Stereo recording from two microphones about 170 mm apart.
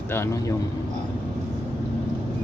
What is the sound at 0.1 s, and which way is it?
Speech, 15° left (ahead or behind).